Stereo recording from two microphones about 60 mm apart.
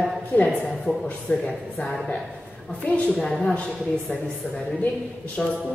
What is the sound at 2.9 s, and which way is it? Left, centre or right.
A man's voice, centre.